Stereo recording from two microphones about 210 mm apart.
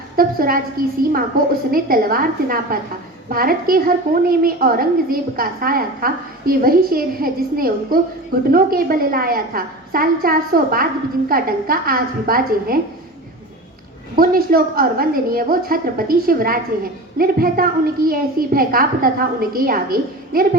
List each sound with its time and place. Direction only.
0.2 s a woman's voice: 45° right (ahead or behind)
1.7 s a woman's voice: 45° right (ahead or behind)
14.2 s a woman's voice: 45° right (ahead or behind)